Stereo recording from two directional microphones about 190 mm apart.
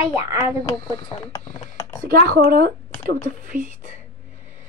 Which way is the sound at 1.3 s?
15° left (ahead or behind).